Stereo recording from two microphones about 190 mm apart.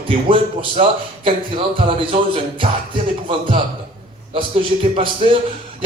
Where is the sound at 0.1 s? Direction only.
25° right (ahead or behind).